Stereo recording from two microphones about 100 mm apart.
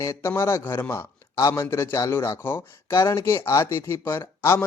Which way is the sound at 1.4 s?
40° left (ahead or behind).